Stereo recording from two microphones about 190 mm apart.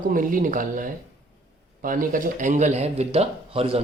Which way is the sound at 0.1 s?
45° right (ahead or behind).